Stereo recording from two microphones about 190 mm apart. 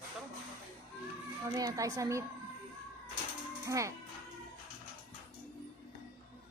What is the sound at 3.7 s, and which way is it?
Speech, 15° right (ahead or behind).